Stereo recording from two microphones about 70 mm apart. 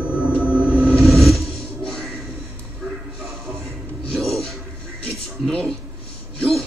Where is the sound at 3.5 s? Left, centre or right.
Right.